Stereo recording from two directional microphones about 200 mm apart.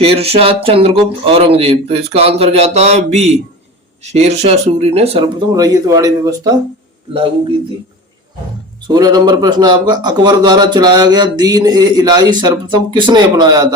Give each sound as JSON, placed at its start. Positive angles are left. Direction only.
{"t": 0.0, "sound": "speech", "side_deg": -30}
{"t": 8.9, "sound": "speech", "side_deg": -20}